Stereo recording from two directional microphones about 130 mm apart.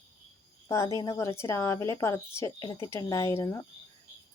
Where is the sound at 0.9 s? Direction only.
25° left (ahead or behind).